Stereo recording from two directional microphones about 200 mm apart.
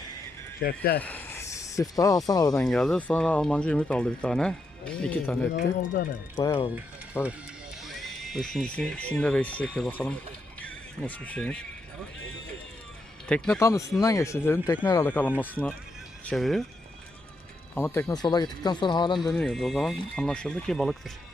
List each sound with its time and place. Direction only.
0.6 s speech: 50° left (ahead or behind)
0.9 s speech: 10° left (ahead or behind)
2.6 s speech: centre (ahead or behind)
5.9 s speech: 45° left (ahead or behind)
6.3 s speech: 20° left (ahead or behind)
7.9 s speech: centre (ahead or behind)
13.2 s speech: 5° left (ahead or behind)
17.7 s speech: 10° left (ahead or behind)
19.3 s speech: centre (ahead or behind)